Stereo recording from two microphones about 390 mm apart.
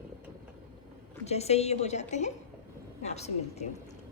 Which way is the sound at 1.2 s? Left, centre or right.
Centre.